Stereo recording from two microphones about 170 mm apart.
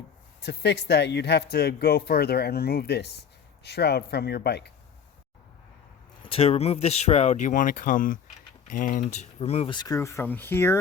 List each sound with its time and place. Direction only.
0.4 s speech: 85° left
6.2 s speech: 35° left (ahead or behind); by 10.8 s 15° left (ahead or behind)